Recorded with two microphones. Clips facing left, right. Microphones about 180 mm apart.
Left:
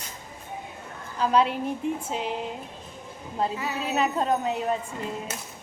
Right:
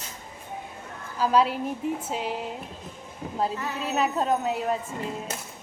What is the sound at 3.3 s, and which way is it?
Speech, centre (ahead or behind).